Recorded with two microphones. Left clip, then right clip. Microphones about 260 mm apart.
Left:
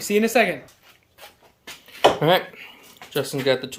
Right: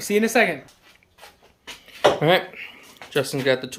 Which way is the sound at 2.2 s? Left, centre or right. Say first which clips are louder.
Even; centre.